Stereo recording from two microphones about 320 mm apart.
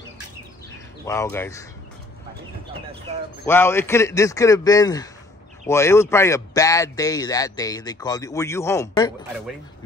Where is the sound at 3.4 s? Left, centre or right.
Centre.